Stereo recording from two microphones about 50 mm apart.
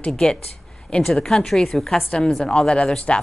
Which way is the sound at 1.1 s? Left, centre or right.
Centre.